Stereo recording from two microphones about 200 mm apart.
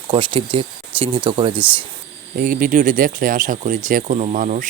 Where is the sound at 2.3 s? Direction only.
40° right (ahead or behind).